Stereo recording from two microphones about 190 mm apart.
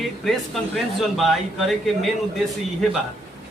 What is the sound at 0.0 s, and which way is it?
Speech, centre (ahead or behind).